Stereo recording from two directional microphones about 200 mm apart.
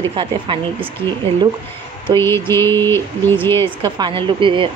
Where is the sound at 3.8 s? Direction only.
20° right (ahead or behind).